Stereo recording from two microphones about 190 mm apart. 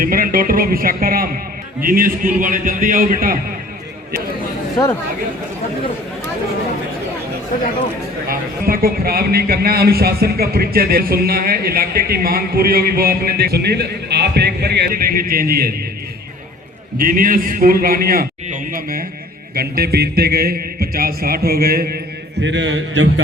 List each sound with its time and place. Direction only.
0.0 s a man's voice: 50° right (ahead or behind)
8.3 s a man's voice: 50° right (ahead or behind)
17.0 s a man's voice: 50° right (ahead or behind); by 23.2 s 75° right (ahead or behind)